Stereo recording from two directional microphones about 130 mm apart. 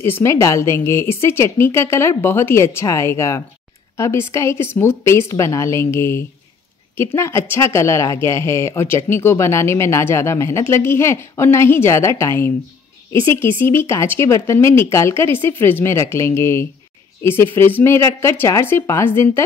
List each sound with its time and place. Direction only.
0.0 s speech: 20° left (ahead or behind)
13.6 s speech: 20° left (ahead or behind)